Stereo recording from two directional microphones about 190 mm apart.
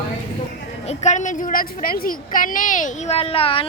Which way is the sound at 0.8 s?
40° left (ahead or behind).